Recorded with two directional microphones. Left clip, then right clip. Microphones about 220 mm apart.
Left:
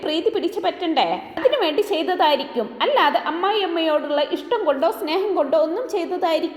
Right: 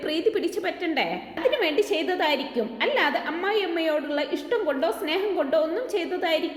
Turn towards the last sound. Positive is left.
turn(degrees=20)  # may be behind; listen again after turning